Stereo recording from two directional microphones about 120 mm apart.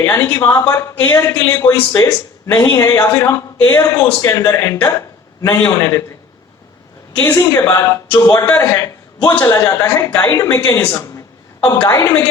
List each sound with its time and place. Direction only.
0.0 s a man's voice: 20° left (ahead or behind)
7.2 s speech: 25° left (ahead or behind)